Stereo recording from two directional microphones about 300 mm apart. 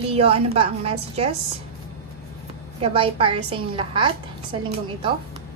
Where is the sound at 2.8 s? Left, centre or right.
Centre.